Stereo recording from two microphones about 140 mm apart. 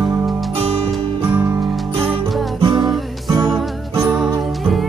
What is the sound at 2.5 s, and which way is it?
Music, 35° right (ahead or behind).